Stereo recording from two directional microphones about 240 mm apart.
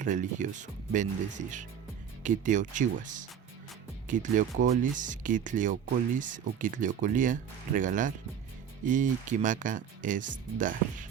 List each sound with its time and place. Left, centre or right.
0.0 s speech: right